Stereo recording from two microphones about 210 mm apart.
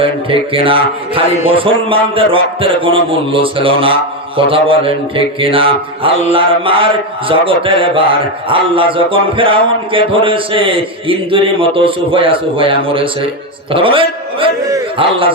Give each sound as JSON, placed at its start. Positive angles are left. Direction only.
{"t": 0.0, "sound": "speech", "side_deg": -25}